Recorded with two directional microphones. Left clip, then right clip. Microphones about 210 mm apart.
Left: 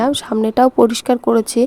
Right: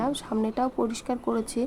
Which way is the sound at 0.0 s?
35° left (ahead or behind).